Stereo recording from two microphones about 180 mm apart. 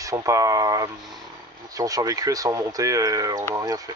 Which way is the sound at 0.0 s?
15° right (ahead or behind).